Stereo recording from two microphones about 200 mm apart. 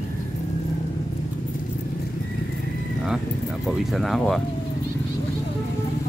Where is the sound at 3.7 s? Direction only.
Centre (ahead or behind).